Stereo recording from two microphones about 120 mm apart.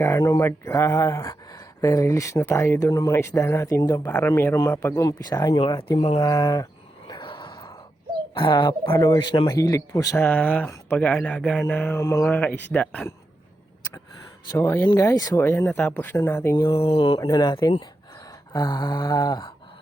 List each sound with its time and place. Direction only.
0.0 s speech: 25° left (ahead or behind)
5.2 s a sound: 30° left (ahead or behind)
5.5 s mantra: 40° left (ahead or behind)
6.1 s speech: 30° left (ahead or behind)
7.1 s a sound: 40° left (ahead or behind)
9.0 s speech: 35° left (ahead or behind)
10.2 s speech: 15° left (ahead or behind)
11.9 s speech: 25° left (ahead or behind)
12.2 s speech: 10° left (ahead or behind)
14.5 s speech: 20° left (ahead or behind)
16.6 s mantra: 50° left (ahead or behind)
17.2 s a sound: 35° left (ahead or behind)